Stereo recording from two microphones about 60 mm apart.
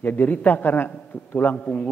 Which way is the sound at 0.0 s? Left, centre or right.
Left.